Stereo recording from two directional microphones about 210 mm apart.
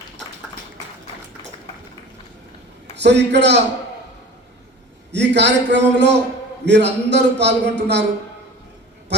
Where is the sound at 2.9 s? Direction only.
55° right (ahead or behind).